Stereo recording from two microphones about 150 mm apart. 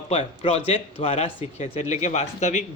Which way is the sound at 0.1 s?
40° left (ahead or behind).